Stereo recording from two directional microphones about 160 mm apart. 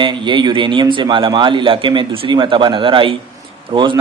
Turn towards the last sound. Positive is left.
turn(degrees=-30)  # may be behind; listen again after turning